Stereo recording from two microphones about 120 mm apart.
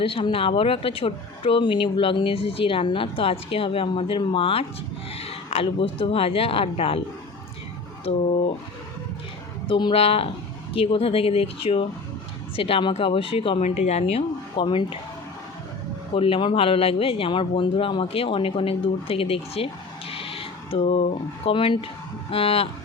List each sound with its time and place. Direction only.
0.0 s speech: 50° left (ahead or behind)
8.1 s speech: 55° left (ahead or behind)
9.6 s speech: 45° left (ahead or behind)
13.6 s speech: 65° left (ahead or behind); by 14.9 s 45° left (ahead or behind)
16.1 s speech: 50° left (ahead or behind)